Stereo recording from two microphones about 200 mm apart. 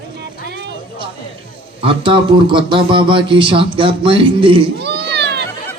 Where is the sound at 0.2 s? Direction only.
60° right (ahead or behind).